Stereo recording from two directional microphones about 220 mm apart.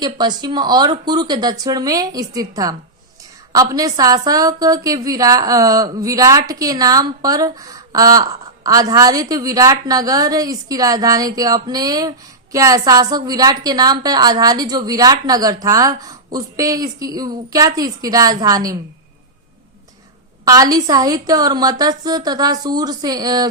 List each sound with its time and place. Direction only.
0.0 s a woman's voice: 20° right (ahead or behind)
20.4 s a woman's voice: 15° right (ahead or behind)